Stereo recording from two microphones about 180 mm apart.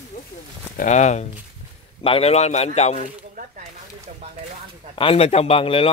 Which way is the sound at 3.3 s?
50° right (ahead or behind).